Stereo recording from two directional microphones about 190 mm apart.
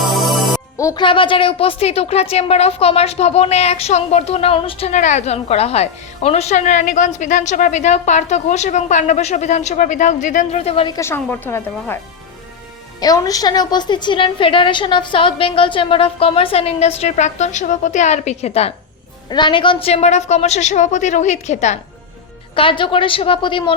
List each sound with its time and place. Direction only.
0.1 s music: centre (ahead or behind)
0.8 s a woman's voice: 20° left (ahead or behind)
4.9 s a woman's voice: 40° left (ahead or behind)
10.9 s speech: 10° left (ahead or behind)
13.0 s a woman's voice: 20° left (ahead or behind); by 21.8 s 35° left (ahead or behind)
22.5 s a woman's voice: 25° left (ahead or behind)